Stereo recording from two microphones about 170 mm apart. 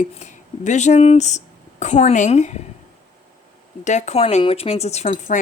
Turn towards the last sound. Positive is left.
turn(degrees=45)  # may be behind; listen again after turning